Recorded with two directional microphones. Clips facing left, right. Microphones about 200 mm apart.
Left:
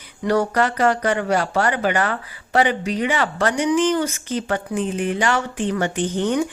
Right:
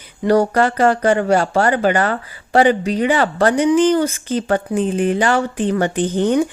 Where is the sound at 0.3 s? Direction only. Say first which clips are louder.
Right 5 dB; 30° right (ahead or behind).